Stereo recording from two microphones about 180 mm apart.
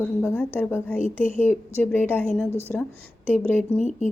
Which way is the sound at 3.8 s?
40° left (ahead or behind).